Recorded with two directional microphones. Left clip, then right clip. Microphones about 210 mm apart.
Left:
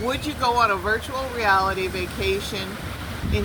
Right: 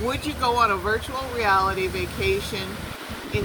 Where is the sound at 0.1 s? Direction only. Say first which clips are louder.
Left 2 dB; 15° left (ahead or behind).